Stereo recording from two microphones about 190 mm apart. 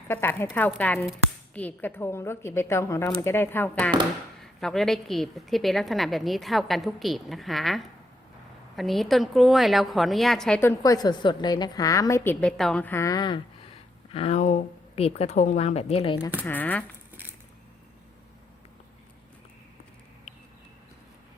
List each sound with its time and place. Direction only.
0.1 s a woman's voice: 10° left (ahead or behind); by 16.3 s 30° left (ahead or behind)
16.4 s a woman's voice: 10° left (ahead or behind)